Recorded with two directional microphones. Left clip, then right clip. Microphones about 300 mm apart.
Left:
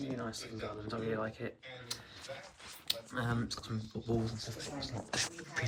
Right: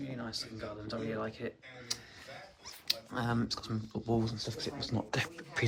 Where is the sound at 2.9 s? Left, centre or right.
Centre.